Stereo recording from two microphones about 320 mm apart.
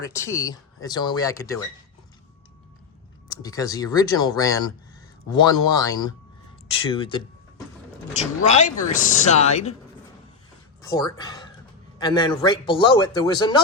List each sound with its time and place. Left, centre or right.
0.0 s speech: centre
3.4 s speech: centre
8.4 s speech: left
10.8 s speech: centre